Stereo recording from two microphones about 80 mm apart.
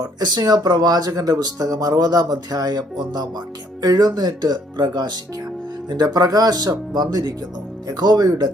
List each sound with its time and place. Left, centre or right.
0.0 s speech: right